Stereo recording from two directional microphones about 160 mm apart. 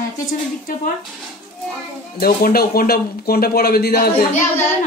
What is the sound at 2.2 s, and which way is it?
Speech, 70° left (ahead or behind).